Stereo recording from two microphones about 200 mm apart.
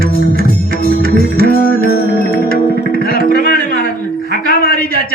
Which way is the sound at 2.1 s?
50° left (ahead or behind).